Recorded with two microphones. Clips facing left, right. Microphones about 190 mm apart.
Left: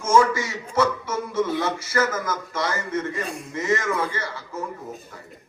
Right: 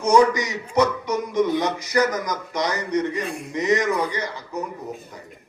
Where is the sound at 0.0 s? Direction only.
15° right (ahead or behind).